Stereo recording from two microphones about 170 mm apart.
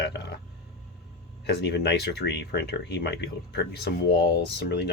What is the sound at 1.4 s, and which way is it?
Speech, 75° left (ahead or behind).